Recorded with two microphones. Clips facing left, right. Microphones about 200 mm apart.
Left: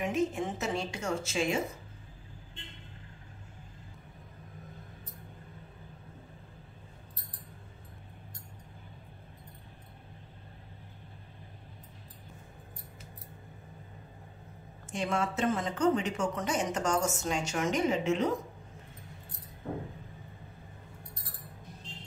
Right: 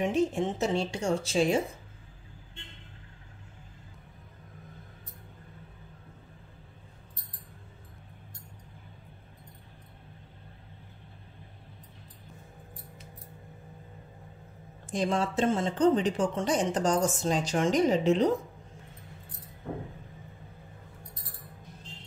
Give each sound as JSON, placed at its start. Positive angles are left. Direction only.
{"t": 0.0, "sound": "speech", "side_deg": -30}
{"t": 14.9, "sound": "speech", "side_deg": -35}